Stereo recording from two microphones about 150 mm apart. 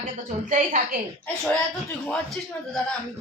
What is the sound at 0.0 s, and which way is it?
A woman's voice, 60° right (ahead or behind).